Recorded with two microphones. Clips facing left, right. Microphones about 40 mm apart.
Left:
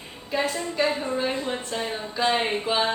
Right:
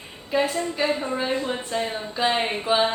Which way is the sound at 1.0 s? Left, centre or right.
Right.